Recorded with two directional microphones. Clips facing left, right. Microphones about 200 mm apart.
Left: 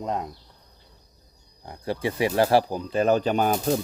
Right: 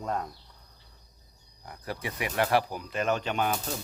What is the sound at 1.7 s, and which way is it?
Speech, 30° left (ahead or behind).